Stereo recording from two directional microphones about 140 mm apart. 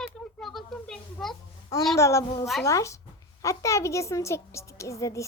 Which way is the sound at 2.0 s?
20° left (ahead or behind).